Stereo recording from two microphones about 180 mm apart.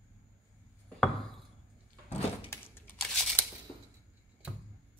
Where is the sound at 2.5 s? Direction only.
10° left (ahead or behind).